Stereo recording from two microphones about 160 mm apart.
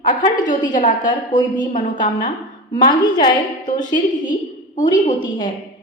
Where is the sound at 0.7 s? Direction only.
50° left (ahead or behind).